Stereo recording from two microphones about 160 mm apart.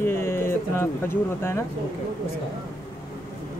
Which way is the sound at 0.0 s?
15° left (ahead or behind).